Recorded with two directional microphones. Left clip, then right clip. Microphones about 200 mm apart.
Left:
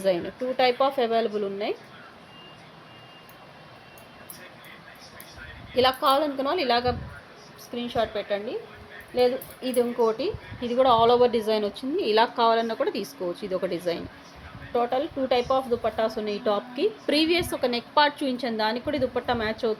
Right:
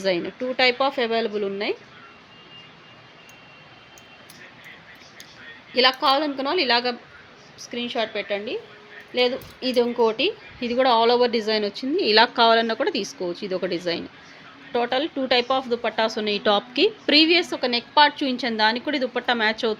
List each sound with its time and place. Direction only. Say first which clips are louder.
0.0 s speech: right 1 dB; 30° right (ahead or behind)
5.7 s speech: right 2 dB; 30° right (ahead or behind)
14.7 s speech: right 2 dB; 40° right (ahead or behind)
17.1 s speech: right 6 dB; 30° right (ahead or behind)